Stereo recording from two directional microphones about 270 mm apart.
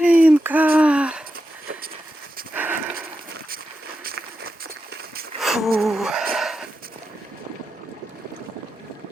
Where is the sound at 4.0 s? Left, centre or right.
Right.